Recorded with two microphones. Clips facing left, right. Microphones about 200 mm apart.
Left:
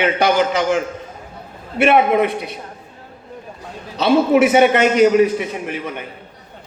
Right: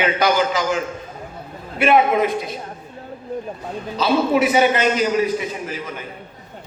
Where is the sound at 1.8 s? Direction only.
65° left (ahead or behind).